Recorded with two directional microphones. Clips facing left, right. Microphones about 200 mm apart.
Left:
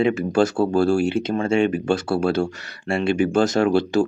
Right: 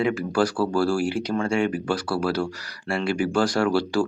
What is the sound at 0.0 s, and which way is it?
Speech, 25° left (ahead or behind).